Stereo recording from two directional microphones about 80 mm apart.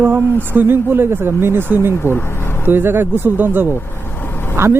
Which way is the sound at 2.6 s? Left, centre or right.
Right.